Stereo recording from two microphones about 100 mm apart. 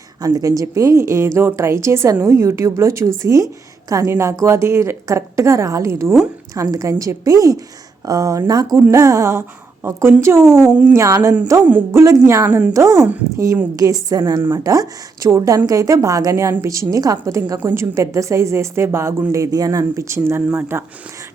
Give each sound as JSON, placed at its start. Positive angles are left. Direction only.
{"t": 0.2, "sound": "a woman's voice", "side_deg": -35}
{"t": 10.7, "sound": "speech", "side_deg": -15}
{"t": 10.9, "sound": "a woman's voice", "side_deg": -30}
{"t": 12.5, "sound": "speech", "side_deg": -15}
{"t": 12.7, "sound": "a woman's voice", "side_deg": -30}